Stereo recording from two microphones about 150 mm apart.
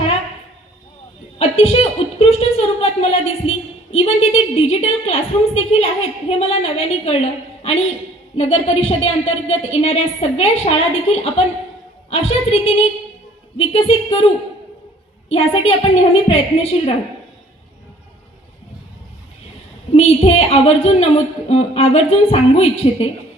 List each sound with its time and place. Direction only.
1.4 s a woman's voice: 40° left (ahead or behind)
15.3 s a woman's voice: 40° left (ahead or behind)
19.9 s a woman's voice: 40° left (ahead or behind)